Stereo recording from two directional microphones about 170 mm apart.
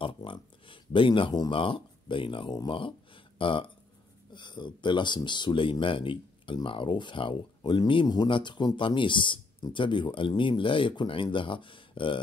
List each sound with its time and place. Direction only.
0.0 s speech: 30° left (ahead or behind)